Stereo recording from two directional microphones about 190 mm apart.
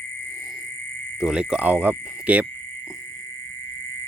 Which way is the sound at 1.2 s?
5° right (ahead or behind).